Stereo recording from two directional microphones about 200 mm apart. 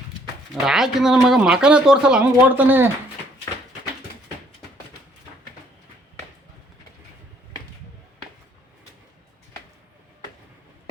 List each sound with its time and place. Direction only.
0.5 s speech: centre (ahead or behind)